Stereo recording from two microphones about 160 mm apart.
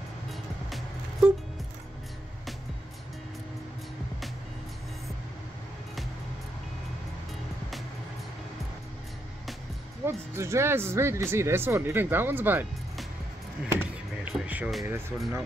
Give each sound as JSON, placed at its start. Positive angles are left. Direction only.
{"t": 0.3, "sound": "music", "side_deg": 0}
{"t": 10.0, "sound": "speech", "side_deg": -15}
{"t": 13.7, "sound": "music", "side_deg": -15}
{"t": 14.9, "sound": "speech", "side_deg": -15}